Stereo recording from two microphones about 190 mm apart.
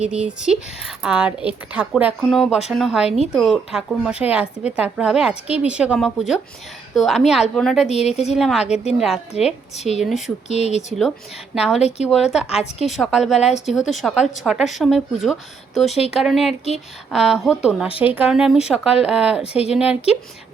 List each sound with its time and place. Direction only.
0.0 s speech: 5° right (ahead or behind)
7.9 s speech: 35° left (ahead or behind)
8.4 s speech: centre (ahead or behind)
9.7 s speech: 35° left (ahead or behind)
10.0 s speech: centre (ahead or behind)
10.5 s speech: 35° left (ahead or behind)
11.5 s speech: 5° right (ahead or behind)
11.8 s speech: 35° left (ahead or behind)
12.1 s speech: centre (ahead or behind)
15.9 s speech: 35° left (ahead or behind)
16.2 s speech: centre (ahead or behind)